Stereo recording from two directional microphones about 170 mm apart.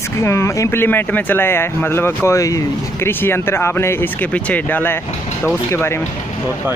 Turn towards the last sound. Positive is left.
turn(degrees=15)  # may be behind; listen again after turning